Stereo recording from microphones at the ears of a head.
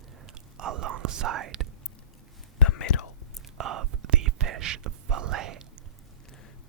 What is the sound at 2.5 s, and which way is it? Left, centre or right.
Whispering, left.